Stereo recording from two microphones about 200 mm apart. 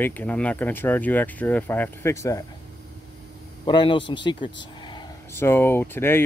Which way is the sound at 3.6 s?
25° left (ahead or behind).